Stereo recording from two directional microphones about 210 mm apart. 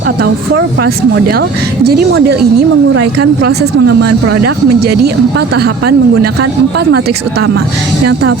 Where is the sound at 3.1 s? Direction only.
50° right (ahead or behind).